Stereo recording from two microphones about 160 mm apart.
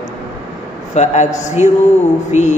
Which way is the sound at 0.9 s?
45° left (ahead or behind).